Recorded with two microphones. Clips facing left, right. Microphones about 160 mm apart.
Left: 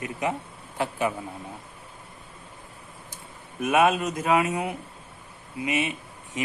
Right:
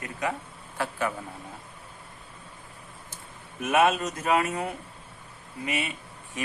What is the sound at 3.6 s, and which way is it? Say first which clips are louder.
Speech: left 2 dB; 15° left (ahead or behind).